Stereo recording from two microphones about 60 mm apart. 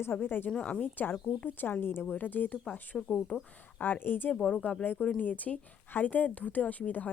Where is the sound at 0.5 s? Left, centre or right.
Left.